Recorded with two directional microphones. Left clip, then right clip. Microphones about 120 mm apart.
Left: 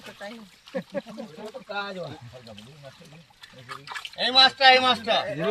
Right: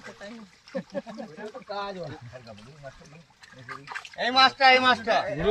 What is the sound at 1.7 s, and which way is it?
Speech, 5° right (ahead or behind).